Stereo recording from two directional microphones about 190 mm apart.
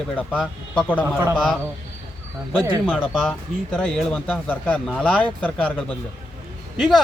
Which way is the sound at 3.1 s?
Centre (ahead or behind).